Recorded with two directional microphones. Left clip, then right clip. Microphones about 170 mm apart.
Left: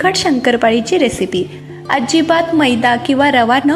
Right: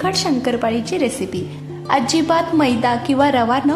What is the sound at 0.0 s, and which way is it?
A woman's voice, 15° left (ahead or behind).